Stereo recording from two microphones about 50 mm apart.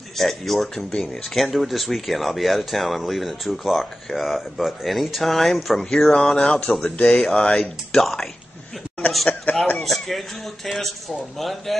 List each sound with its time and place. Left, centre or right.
0.2 s speech: centre
6.8 s speech: left; by 8.3 s centre
9.5 s speech: left
9.8 s speech: centre